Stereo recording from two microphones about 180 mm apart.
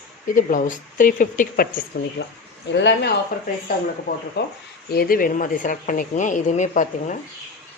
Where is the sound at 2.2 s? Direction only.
75° left (ahead or behind).